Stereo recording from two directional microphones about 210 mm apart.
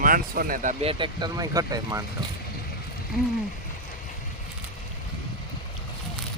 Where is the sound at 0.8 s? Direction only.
20° right (ahead or behind).